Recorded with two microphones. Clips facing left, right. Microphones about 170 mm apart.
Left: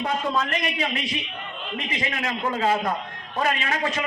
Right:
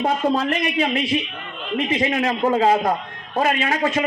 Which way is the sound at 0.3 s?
35° right (ahead or behind).